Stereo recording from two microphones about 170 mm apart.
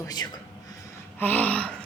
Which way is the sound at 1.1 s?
10° left (ahead or behind).